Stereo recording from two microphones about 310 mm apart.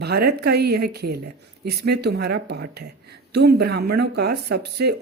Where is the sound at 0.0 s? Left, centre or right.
Right.